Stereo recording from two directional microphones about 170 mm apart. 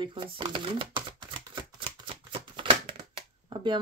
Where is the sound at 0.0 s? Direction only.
30° right (ahead or behind).